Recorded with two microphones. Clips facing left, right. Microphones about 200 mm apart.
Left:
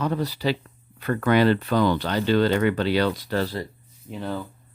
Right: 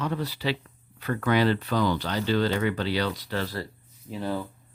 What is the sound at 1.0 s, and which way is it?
Speech, 55° left (ahead or behind).